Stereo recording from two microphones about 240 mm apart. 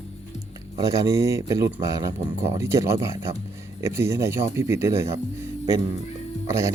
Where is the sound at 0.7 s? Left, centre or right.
Centre.